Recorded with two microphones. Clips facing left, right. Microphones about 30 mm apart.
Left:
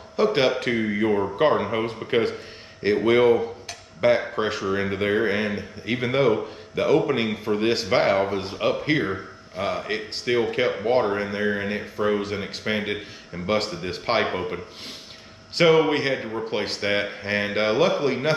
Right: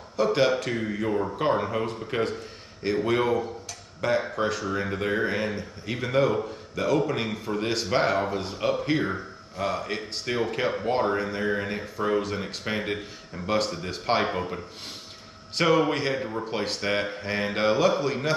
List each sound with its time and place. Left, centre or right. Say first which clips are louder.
0.1 s a man's voice: left 2 dB; left